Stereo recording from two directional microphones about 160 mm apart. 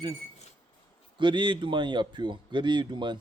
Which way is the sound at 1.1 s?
30° right (ahead or behind).